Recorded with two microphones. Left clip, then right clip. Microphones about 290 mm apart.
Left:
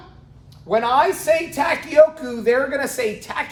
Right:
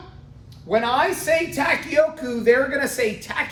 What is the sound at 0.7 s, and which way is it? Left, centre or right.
Speech, centre.